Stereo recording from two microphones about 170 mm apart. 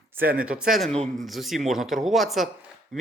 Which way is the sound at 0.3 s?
5° right (ahead or behind).